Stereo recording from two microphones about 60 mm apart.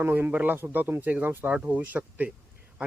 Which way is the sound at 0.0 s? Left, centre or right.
Right.